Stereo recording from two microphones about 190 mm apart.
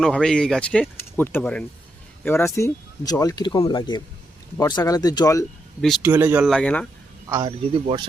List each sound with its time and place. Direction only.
0.0 s speech: 5° left (ahead or behind); by 5.5 s 20° left (ahead or behind)
6.0 s speech: 10° right (ahead or behind)
6.5 s speech: 5° left (ahead or behind)
7.3 s speech: 15° right (ahead or behind)
7.7 s speech: 30° right (ahead or behind)